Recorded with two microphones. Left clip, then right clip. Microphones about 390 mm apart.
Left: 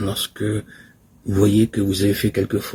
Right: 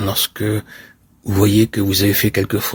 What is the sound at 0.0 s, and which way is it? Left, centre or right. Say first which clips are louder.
Speech: right 4 dB; right.